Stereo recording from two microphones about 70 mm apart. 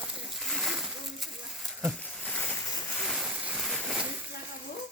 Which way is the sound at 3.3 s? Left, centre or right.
Centre.